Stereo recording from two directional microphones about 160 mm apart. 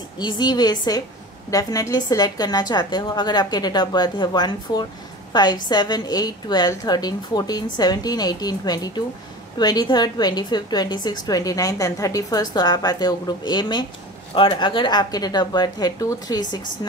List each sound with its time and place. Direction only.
0.2 s a woman's voice: 25° left (ahead or behind)